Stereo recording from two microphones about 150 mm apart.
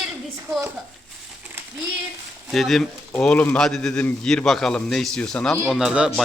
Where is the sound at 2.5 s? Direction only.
Centre (ahead or behind).